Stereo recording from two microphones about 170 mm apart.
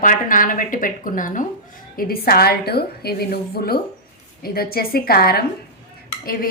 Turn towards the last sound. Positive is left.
turn(degrees=60)  # may be behind; listen again after turning